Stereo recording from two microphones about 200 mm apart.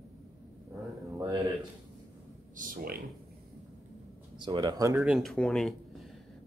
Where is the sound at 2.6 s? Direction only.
45° right (ahead or behind).